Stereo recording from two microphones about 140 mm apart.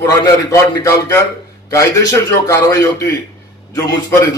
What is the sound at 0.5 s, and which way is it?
A man's voice, 20° left (ahead or behind).